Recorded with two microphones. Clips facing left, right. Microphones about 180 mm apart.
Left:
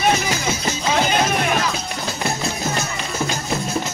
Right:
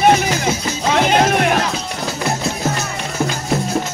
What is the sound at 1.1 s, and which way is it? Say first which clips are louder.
Music: right 5 dB; 65° right (ahead or behind).